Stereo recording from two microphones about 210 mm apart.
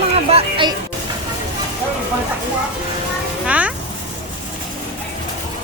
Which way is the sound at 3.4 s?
5° right (ahead or behind).